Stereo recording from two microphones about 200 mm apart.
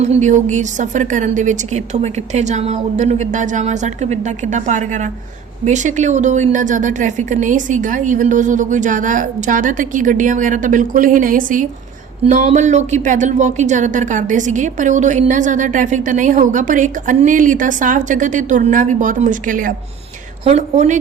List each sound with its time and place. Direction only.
0.0 s speech: 35° right (ahead or behind)